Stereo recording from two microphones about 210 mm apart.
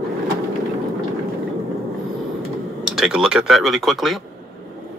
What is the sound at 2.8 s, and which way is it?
Speech, centre (ahead or behind).